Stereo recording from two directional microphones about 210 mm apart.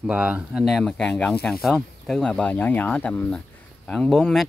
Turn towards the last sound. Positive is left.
turn(degrees=5)  # may be behind; listen again after turning